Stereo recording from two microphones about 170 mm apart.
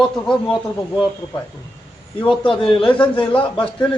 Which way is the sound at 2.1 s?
30° left (ahead or behind).